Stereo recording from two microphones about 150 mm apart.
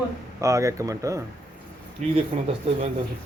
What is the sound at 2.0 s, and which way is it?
Speech, 55° right (ahead or behind).